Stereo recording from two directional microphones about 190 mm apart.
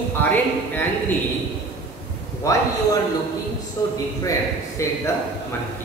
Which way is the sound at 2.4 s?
15° left (ahead or behind).